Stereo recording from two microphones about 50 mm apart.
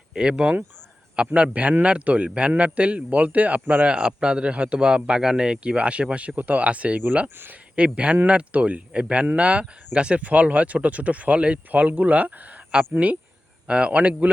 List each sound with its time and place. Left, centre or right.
0.1 s a man's voice: centre; by 13.1 s right
13.7 s a man's voice: right